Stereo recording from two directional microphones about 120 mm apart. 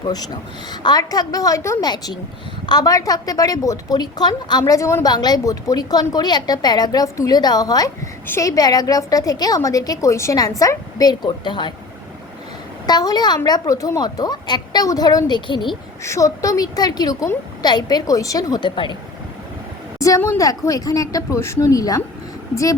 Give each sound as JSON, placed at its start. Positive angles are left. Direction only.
{"t": 0.7, "sound": "a woman's voice", "side_deg": 35}
{"t": 5.1, "sound": "a woman's voice", "side_deg": 35}
{"t": 12.8, "sound": "a woman's voice", "side_deg": 35}
{"t": 16.0, "sound": "a woman's voice", "side_deg": 25}
{"t": 20.0, "sound": "a woman's voice", "side_deg": 25}